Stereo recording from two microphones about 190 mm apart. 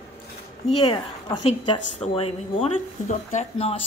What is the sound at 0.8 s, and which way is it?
A woman's voice, 25° left (ahead or behind).